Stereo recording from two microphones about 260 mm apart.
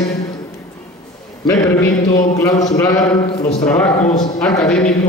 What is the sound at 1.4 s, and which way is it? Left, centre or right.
A man's voice, centre.